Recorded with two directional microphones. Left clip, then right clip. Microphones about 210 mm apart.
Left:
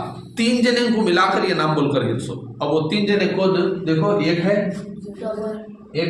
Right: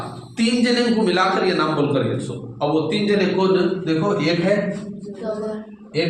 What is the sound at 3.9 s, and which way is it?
Speech, 20° left (ahead or behind).